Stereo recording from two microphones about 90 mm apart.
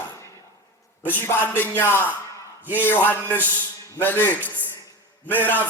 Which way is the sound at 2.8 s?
20° left (ahead or behind).